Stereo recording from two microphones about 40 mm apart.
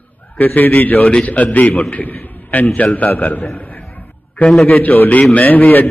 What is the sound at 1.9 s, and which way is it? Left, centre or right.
A man's voice, left.